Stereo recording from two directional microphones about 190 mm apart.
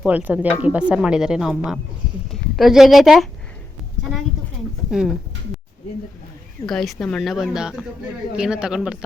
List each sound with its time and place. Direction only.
0.0 s speech: 10° right (ahead or behind)
4.9 s speech: 5° right (ahead or behind)
6.7 s speech: centre (ahead or behind)